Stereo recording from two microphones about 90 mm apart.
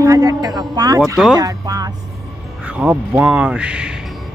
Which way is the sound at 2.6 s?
15° right (ahead or behind).